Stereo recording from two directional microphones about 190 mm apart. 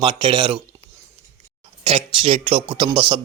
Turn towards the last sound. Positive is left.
turn(degrees=-30)  # may be behind; listen again after turning